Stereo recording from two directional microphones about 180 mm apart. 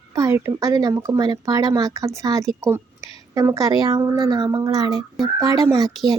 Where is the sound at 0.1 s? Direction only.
20° right (ahead or behind).